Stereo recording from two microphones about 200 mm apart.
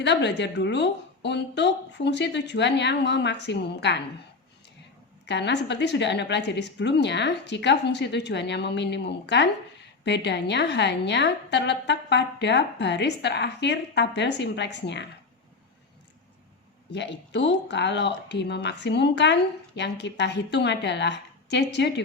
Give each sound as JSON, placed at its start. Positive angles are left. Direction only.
{"t": 0.0, "sound": "speech", "side_deg": 60}
{"t": 5.2, "sound": "speech", "side_deg": 60}
{"t": 16.9, "sound": "speech", "side_deg": 60}